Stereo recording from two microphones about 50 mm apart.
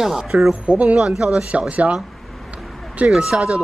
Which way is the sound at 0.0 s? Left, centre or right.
Centre.